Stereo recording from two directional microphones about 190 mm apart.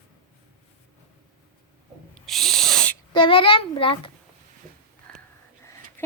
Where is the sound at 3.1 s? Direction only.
25° left (ahead or behind).